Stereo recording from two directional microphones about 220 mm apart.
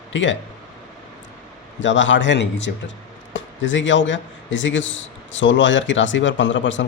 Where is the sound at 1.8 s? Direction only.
55° left (ahead or behind).